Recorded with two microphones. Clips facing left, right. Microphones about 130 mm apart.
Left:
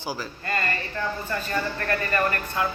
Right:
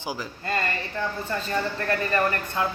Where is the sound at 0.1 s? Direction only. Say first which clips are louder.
Even; 20° right (ahead or behind).